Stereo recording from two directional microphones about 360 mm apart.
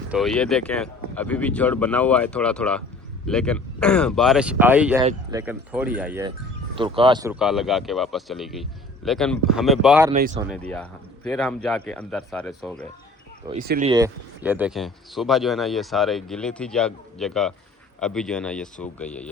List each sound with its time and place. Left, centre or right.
0.1 s speech: centre
10.1 s speech: centre
10.5 s speech: centre
13.5 s speech: right
13.9 s speech: centre